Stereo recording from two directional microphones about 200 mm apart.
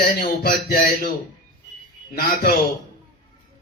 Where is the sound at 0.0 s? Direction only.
50° left (ahead or behind).